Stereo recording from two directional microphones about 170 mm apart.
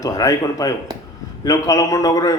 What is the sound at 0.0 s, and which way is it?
A man's voice, 20° left (ahead or behind).